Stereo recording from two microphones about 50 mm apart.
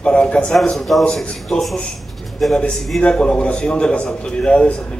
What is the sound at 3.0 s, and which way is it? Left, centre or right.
A man's voice, centre.